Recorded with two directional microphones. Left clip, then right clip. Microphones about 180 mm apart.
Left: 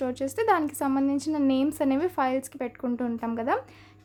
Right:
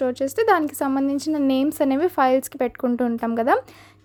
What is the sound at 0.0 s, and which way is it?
A woman's voice, 25° right (ahead or behind).